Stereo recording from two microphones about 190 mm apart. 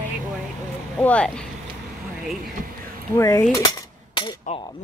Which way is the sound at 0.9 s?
5° left (ahead or behind).